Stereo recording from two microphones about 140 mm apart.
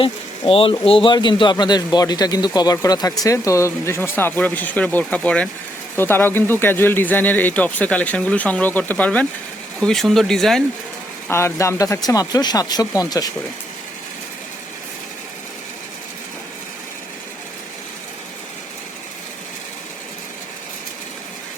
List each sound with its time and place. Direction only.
0.0 s speech: 40° left (ahead or behind); by 10.6 s centre (ahead or behind)
11.3 s speech: 20° left (ahead or behind)